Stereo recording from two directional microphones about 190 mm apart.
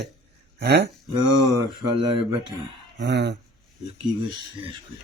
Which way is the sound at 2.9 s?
65° right (ahead or behind).